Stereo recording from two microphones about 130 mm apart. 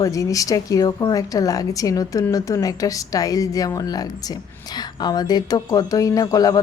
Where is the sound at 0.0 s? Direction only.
25° left (ahead or behind).